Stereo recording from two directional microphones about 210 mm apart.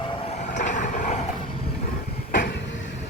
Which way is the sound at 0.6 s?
35° left (ahead or behind).